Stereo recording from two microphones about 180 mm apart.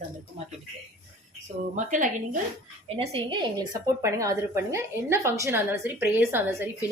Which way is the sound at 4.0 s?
15° right (ahead or behind).